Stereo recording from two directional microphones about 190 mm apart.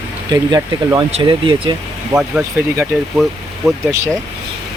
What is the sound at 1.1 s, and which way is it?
Speech, 25° right (ahead or behind).